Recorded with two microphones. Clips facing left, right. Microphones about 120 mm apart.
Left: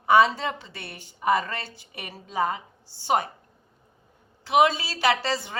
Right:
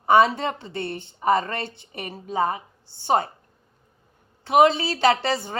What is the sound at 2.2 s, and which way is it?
A woman's voice, 25° right (ahead or behind).